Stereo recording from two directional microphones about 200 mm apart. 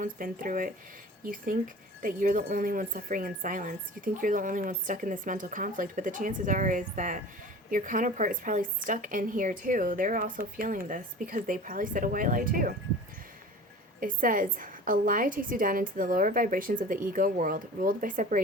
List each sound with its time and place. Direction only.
0.0 s a woman's voice: 45° right (ahead or behind)
14.0 s a woman's voice: 45° right (ahead or behind)